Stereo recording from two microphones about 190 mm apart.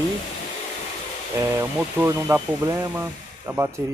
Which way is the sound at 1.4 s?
15° right (ahead or behind).